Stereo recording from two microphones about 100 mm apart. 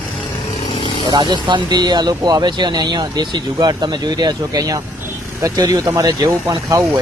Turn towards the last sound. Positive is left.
turn(degrees=-35)  # may be behind; listen again after turning